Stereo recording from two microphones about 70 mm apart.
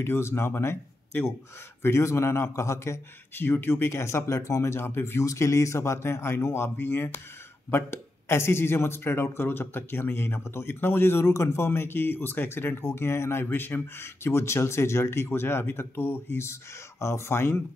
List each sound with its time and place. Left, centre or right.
0.0 s speech: left
5.2 s speech: left